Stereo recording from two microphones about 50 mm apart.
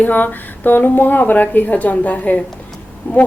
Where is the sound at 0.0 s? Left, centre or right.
Left.